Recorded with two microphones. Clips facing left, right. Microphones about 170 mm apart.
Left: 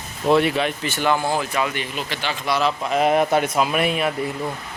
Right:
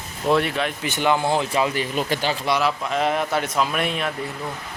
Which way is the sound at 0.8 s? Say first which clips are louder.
Right 4 dB; 15° right (ahead or behind).